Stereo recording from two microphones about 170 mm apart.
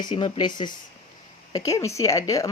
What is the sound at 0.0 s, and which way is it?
A woman's voice, 25° left (ahead or behind).